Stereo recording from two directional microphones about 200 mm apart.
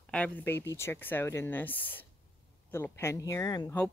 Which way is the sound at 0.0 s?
5° left (ahead or behind).